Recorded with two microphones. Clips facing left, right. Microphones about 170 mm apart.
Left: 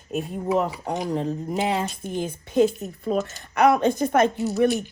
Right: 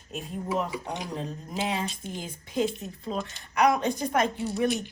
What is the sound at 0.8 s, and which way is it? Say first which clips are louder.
Speech: left 7 dB; 40° left (ahead or behind).